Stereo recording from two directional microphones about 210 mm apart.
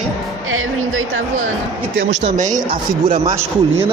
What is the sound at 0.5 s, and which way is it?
Music, 75° right (ahead or behind).